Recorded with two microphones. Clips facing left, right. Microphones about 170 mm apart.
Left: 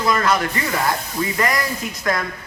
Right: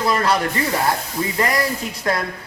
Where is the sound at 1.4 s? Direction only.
30° right (ahead or behind).